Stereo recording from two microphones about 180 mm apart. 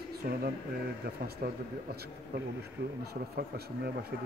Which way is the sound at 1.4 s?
60° right (ahead or behind).